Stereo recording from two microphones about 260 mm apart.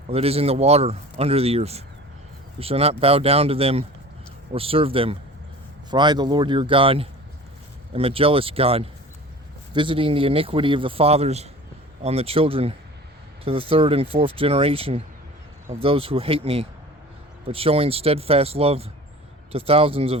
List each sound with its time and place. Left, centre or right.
0.1 s speech: right